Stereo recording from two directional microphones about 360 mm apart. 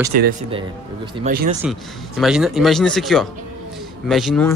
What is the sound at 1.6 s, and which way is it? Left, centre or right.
Speech, centre.